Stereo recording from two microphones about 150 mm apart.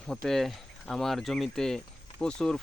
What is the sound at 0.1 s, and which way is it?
Speech, centre (ahead or behind).